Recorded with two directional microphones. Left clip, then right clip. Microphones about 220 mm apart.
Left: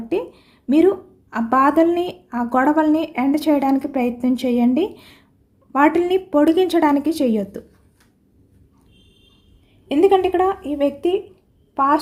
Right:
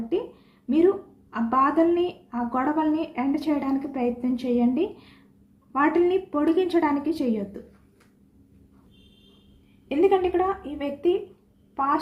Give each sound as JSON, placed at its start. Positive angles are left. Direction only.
{"t": 0.1, "sound": "a sound", "side_deg": 55}
{"t": 1.3, "sound": "a woman's voice", "side_deg": 55}
{"t": 9.9, "sound": "a woman's voice", "side_deg": 50}